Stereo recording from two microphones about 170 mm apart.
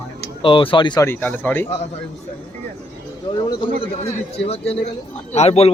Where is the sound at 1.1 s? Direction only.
10° left (ahead or behind).